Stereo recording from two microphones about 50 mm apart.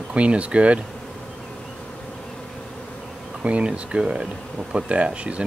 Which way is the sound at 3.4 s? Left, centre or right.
Right.